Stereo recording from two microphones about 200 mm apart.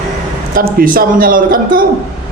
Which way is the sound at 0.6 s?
45° right (ahead or behind).